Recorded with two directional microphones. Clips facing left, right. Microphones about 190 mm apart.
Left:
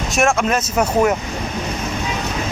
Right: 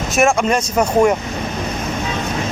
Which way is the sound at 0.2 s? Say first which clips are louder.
Right 2 dB; centre (ahead or behind).